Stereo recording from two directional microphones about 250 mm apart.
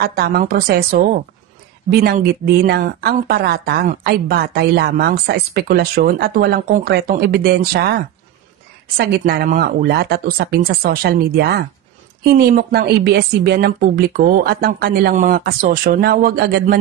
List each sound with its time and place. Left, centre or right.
0.0 s speech: right